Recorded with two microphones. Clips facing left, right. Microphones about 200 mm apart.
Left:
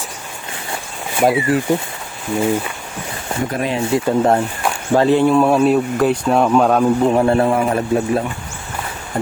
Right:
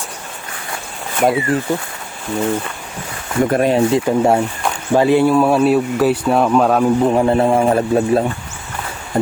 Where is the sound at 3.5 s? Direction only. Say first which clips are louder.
Right 7 dB; 50° right (ahead or behind).